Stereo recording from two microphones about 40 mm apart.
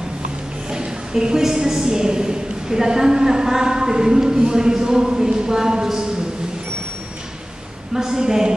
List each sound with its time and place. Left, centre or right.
0.7 s a woman's voice: centre
7.9 s a woman's voice: centre